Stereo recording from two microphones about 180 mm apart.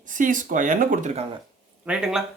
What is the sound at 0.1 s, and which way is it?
Speech, 45° right (ahead or behind).